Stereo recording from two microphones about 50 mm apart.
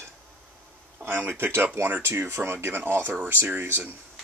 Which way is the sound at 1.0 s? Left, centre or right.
Right.